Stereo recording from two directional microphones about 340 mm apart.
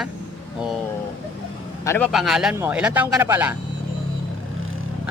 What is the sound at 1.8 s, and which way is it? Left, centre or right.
Speech, centre.